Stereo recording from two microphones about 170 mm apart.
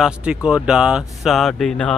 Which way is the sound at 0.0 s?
5° right (ahead or behind).